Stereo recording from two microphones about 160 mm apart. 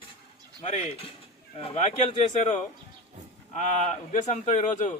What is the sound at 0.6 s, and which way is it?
Speech, 40° left (ahead or behind).